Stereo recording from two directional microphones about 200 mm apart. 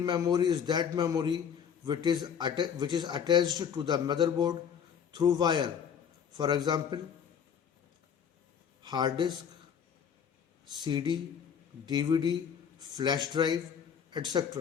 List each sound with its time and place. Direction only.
0.0 s speech: 20° right (ahead or behind)
8.8 s speech: 20° right (ahead or behind)
10.7 s speech: 20° right (ahead or behind)